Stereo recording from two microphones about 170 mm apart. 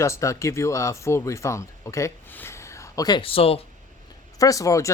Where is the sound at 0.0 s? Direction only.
15° left (ahead or behind); by 3.6 s 35° left (ahead or behind).